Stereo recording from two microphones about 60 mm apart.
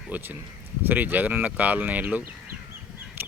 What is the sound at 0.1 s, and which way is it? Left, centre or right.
Speech, right.